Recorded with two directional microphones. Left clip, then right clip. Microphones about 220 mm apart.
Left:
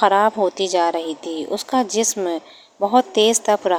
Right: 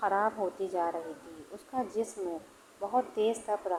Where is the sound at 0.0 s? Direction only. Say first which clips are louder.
Left 14 dB; 40° left (ahead or behind).